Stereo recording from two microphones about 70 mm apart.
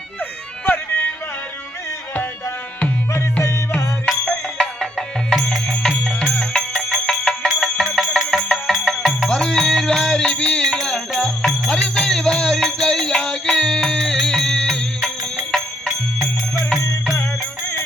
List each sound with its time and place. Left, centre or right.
0.2 s music: left
4.3 s music: centre